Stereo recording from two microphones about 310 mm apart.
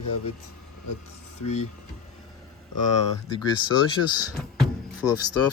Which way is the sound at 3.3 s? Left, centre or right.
Centre.